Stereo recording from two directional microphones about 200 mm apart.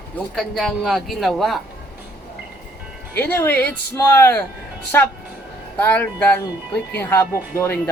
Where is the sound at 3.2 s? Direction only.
10° left (ahead or behind).